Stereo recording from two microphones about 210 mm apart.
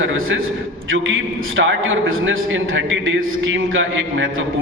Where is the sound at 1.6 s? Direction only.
70° right (ahead or behind).